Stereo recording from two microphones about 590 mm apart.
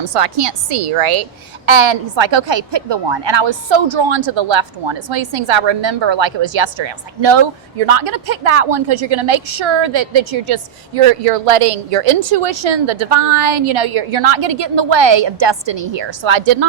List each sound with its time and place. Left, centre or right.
0.0 s a woman's voice: right